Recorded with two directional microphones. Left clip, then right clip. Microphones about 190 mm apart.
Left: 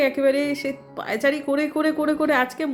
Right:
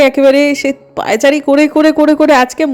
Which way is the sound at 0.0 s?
40° right (ahead or behind).